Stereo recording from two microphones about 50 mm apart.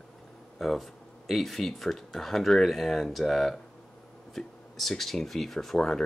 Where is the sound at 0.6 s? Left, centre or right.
Centre.